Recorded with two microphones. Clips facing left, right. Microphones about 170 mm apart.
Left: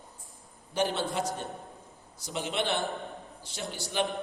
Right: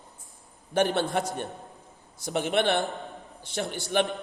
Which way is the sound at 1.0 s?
60° right (ahead or behind).